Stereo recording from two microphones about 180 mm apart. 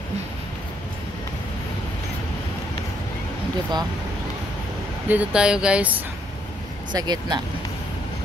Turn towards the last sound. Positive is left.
turn(degrees=-25)  # may be behind; listen again after turning